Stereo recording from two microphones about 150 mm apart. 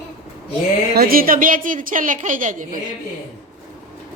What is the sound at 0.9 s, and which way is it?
A woman's voice, 80° right.